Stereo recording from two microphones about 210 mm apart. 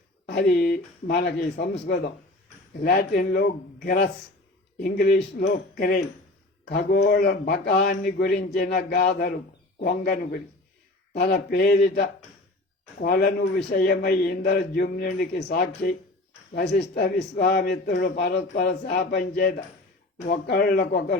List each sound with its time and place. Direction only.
0.3 s a man's voice: 50° left (ahead or behind)